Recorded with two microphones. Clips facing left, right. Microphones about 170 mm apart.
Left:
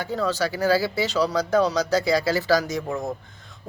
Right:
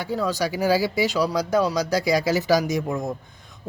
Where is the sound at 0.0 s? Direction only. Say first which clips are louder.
Even; 10° right (ahead or behind).